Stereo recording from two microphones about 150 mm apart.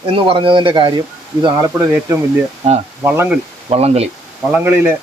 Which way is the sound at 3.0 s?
15° right (ahead or behind).